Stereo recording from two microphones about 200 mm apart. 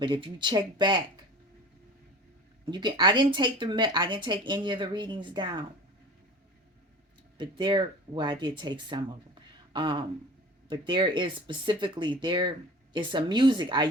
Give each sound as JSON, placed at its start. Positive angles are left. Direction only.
{"t": 0.0, "sound": "speech", "side_deg": -25}
{"t": 2.6, "sound": "speech", "side_deg": -20}
{"t": 7.3, "sound": "speech", "side_deg": -25}